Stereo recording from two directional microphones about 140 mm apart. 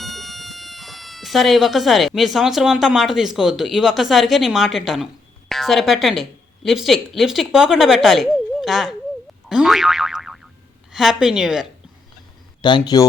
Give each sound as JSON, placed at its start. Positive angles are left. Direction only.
{"t": 0.0, "sound": "speech", "side_deg": 0}
{"t": 9.5, "sound": "boing", "side_deg": -5}
{"t": 10.9, "sound": "a woman's voice", "side_deg": 0}
{"t": 12.6, "sound": "a man's voice", "side_deg": 30}